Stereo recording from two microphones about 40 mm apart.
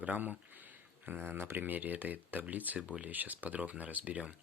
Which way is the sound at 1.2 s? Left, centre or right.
Right.